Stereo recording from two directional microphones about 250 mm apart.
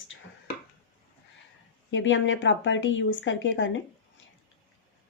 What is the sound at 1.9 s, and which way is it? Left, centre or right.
Speech, left.